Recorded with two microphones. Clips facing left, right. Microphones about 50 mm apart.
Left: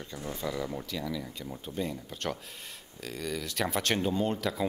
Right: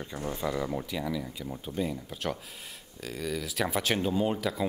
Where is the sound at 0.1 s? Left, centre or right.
Centre.